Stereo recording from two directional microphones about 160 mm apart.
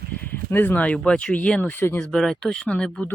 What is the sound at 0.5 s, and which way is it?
Speech, 10° left (ahead or behind).